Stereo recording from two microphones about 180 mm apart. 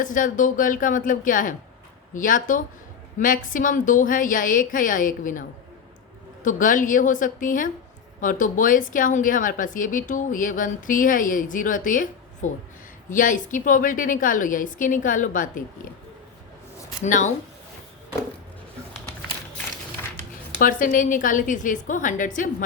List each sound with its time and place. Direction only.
0.0 s a woman's voice: 45° left (ahead or behind)
17.0 s a woman's voice: 45° left (ahead or behind)
20.6 s a woman's voice: 50° left (ahead or behind)